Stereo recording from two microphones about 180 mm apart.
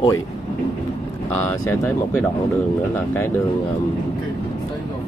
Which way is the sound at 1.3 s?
15° left (ahead or behind).